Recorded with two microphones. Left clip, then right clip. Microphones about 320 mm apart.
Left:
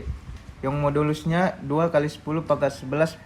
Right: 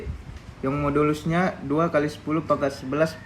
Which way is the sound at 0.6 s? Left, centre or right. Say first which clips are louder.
Right 1 dB; left.